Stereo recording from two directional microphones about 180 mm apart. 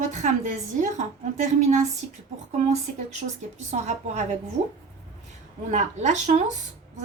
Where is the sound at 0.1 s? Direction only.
45° right (ahead or behind).